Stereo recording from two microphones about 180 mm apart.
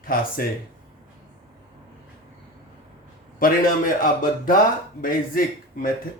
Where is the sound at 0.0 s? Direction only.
50° left (ahead or behind).